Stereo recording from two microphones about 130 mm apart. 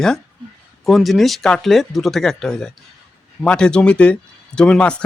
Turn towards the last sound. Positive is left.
turn(degrees=5)  # may be behind; listen again after turning